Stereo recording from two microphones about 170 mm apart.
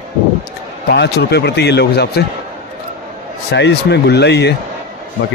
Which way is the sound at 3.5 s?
85° left.